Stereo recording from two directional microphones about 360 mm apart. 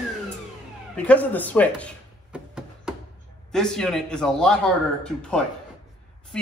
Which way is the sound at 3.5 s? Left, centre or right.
Centre.